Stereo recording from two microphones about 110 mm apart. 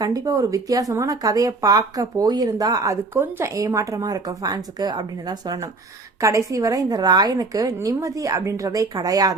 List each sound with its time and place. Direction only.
0.0 s speech: 30° right (ahead or behind)